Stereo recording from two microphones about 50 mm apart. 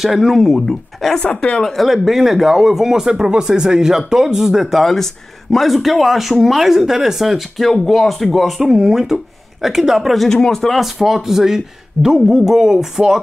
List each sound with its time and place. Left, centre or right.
0.0 s speech: centre
1.2 s a woman's voice: left
1.6 s speech: centre
10.2 s speech: centre
11.0 s a man's voice: centre